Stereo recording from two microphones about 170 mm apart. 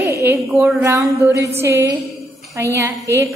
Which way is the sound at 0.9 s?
20° right (ahead or behind).